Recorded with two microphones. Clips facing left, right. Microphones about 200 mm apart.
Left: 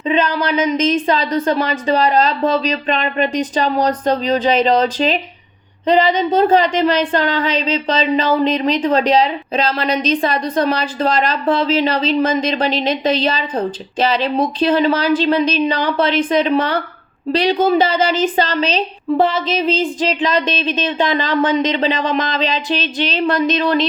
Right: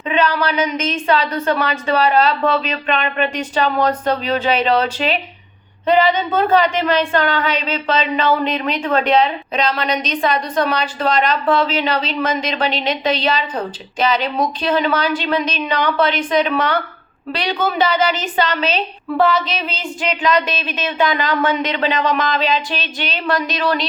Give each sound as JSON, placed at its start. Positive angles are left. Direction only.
{"t": 0.1, "sound": "speech", "side_deg": 30}